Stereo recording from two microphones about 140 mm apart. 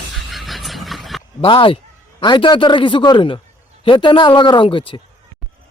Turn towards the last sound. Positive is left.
turn(degrees=35)  # may be behind; listen again after turning